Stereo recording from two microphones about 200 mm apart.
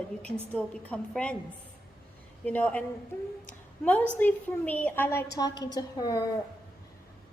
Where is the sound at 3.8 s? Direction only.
10° left (ahead or behind).